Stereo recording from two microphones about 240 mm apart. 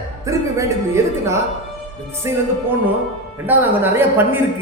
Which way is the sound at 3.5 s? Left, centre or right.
Centre.